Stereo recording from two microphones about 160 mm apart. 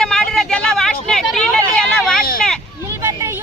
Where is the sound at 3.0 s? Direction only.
20° right (ahead or behind).